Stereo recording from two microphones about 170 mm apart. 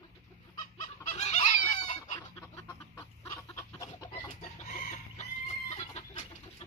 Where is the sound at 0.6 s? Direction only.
45° left (ahead or behind).